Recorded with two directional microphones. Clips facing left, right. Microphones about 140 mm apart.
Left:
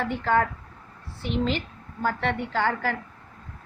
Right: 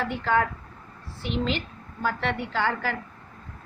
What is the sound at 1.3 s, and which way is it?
A woman's voice, 50° left (ahead or behind).